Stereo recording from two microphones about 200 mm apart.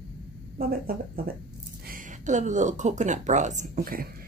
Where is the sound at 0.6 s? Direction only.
50° right (ahead or behind).